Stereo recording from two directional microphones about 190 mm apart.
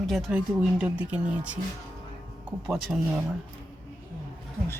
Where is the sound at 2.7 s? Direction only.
Centre (ahead or behind).